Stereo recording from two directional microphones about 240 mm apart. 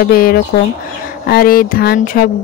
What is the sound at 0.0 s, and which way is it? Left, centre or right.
Speech, left.